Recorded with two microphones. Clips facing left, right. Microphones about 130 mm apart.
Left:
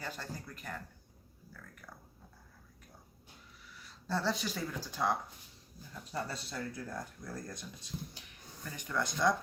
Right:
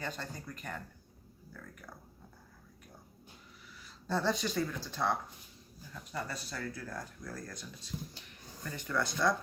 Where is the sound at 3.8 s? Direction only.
Centre (ahead or behind).